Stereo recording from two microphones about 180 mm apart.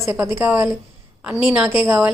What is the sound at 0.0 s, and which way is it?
A woman's voice, 15° right (ahead or behind).